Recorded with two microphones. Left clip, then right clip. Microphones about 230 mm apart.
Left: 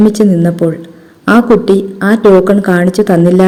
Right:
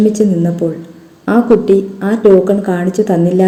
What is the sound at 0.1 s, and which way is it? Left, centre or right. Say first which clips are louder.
A woman's voice: left 3 dB; left.